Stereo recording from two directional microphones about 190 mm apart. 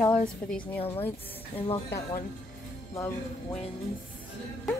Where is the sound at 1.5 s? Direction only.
30° left (ahead or behind).